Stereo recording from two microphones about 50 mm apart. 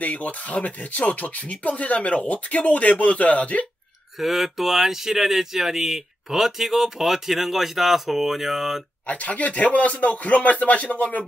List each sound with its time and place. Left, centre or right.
0.0 s speech: left
4.2 s speech: centre
9.0 s speech: left